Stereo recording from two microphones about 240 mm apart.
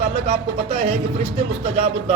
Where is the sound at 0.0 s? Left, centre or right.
Right.